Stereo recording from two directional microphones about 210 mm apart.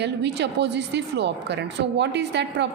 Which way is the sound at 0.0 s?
55° right (ahead or behind).